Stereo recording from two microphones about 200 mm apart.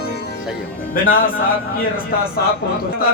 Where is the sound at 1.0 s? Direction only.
45° left (ahead or behind).